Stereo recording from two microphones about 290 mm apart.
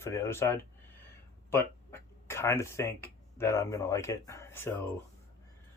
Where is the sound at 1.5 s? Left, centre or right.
Centre.